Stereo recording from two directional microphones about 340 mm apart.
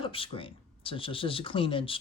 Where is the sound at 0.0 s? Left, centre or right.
Centre.